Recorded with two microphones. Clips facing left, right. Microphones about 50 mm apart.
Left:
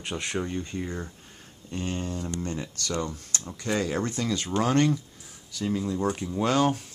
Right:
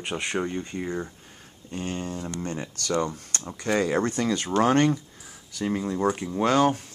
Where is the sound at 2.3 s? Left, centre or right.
Right.